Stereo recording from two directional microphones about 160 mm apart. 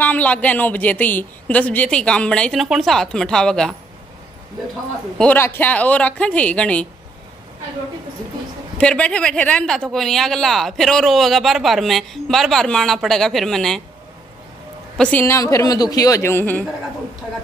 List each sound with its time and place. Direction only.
0.0 s a man's voice: 10° left (ahead or behind)
5.2 s a man's voice: 10° left (ahead or behind)
8.7 s speech: 5° left (ahead or behind)
15.0 s a woman's voice: 10° left (ahead or behind)